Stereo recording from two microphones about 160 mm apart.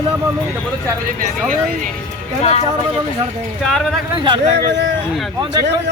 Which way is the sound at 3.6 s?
Centre (ahead or behind).